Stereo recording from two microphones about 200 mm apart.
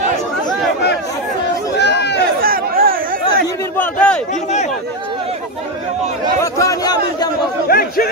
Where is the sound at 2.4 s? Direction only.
45° right (ahead or behind).